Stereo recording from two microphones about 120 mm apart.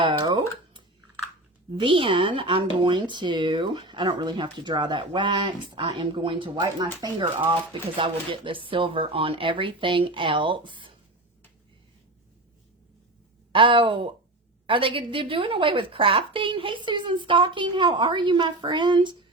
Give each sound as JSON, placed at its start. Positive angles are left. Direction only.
{"t": 0.0, "sound": "a sound", "side_deg": -40}
{"t": 1.7, "sound": "a woman's voice", "side_deg": -45}
{"t": 13.5, "sound": "a woman's voice", "side_deg": -45}